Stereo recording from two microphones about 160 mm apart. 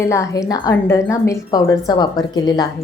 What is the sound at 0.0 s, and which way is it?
A woman's voice, 20° left (ahead or behind).